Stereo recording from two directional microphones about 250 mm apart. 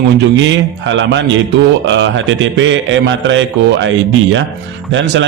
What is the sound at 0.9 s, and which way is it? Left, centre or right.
A man's voice, right.